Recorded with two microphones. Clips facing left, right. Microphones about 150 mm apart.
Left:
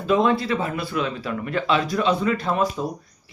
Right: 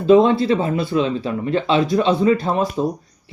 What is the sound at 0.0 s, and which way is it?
Speech, 30° right (ahead or behind).